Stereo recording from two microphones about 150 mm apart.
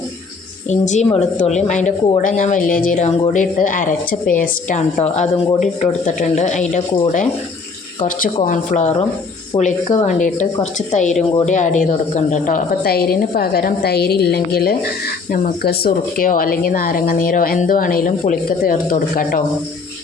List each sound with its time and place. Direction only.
0.7 s a woman's voice: 50° left (ahead or behind)
8.4 s a woman's voice: 50° left (ahead or behind)